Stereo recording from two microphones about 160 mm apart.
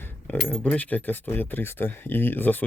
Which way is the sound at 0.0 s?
15° left (ahead or behind).